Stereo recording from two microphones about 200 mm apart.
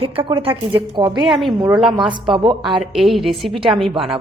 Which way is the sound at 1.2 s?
Centre (ahead or behind).